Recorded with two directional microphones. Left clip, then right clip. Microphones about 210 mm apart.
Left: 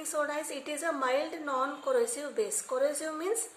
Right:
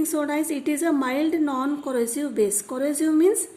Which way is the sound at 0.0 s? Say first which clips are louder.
Right 8 dB; 45° right (ahead or behind).